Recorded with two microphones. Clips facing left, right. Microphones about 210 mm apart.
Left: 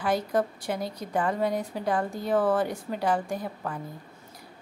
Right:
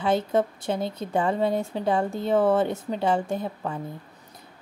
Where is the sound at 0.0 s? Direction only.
25° right (ahead or behind).